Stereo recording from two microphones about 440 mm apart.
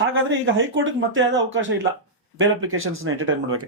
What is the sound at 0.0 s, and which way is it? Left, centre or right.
Speech, right.